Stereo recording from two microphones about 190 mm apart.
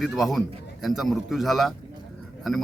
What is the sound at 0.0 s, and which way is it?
A man's voice, centre (ahead or behind).